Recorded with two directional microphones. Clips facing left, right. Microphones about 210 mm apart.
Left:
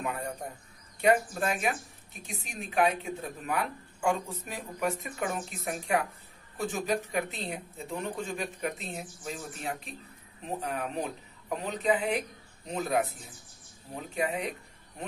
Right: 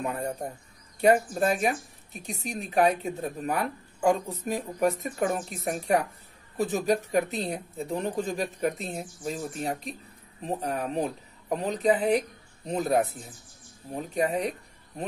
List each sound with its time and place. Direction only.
0.0 s speech: 35° right (ahead or behind)